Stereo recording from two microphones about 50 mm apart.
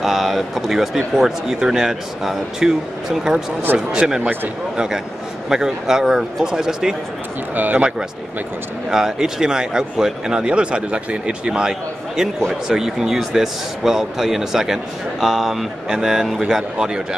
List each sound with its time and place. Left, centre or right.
0.0 s a man's voice: centre
7.5 s speech: right
8.9 s a man's voice: centre